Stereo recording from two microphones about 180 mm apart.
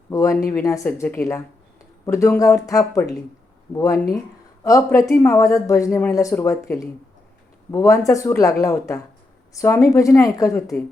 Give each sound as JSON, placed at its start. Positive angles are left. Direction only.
{"t": 0.1, "sound": "speech", "side_deg": 15}